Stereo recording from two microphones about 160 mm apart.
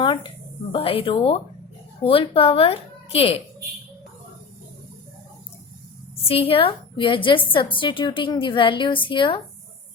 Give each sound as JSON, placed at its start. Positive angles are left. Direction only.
{"t": 0.0, "sound": "a sound", "side_deg": 30}
{"t": 0.7, "sound": "a woman's voice", "side_deg": 35}
{"t": 6.2, "sound": "a woman's voice", "side_deg": 35}